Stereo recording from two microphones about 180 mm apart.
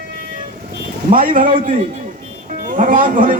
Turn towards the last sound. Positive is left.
turn(degrees=-45)  # may be behind; listen again after turning